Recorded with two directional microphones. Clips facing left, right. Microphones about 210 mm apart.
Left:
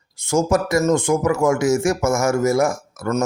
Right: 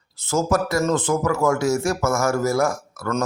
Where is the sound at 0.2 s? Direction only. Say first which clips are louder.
Left 3 dB; 15° left (ahead or behind).